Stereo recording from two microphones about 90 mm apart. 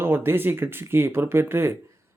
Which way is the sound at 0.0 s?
25° right (ahead or behind).